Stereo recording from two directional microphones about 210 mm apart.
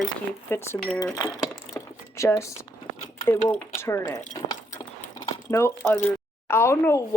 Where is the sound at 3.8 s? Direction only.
10° left (ahead or behind).